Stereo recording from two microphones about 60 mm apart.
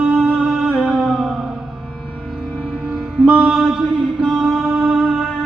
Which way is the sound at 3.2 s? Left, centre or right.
Centre.